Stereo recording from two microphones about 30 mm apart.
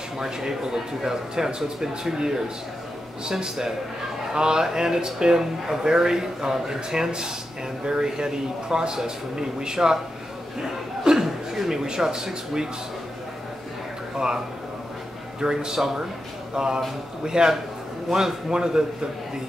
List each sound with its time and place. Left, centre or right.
0.2 s speech: centre
10.6 s chuckle: centre
14.1 s speech: right
15.5 s speech: centre